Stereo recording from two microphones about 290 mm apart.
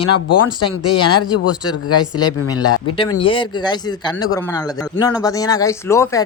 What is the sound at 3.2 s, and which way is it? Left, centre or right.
Speech, centre.